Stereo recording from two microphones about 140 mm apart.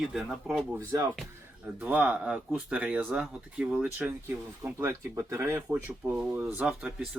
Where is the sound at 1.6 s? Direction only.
10° right (ahead or behind).